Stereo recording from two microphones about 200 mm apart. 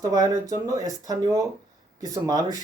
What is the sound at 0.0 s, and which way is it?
Speech, 20° right (ahead or behind).